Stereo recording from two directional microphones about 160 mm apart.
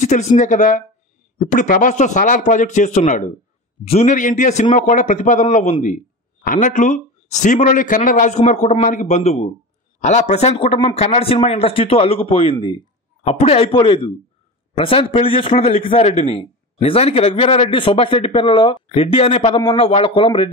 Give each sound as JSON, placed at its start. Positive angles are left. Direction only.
{"t": 0.0, "sound": "a man's voice", "side_deg": 45}
{"t": 13.3, "sound": "speech", "side_deg": 40}